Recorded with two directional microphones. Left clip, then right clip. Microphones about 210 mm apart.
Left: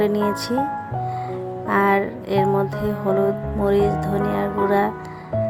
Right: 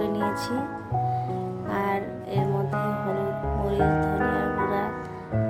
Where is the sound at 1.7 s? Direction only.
25° left (ahead or behind).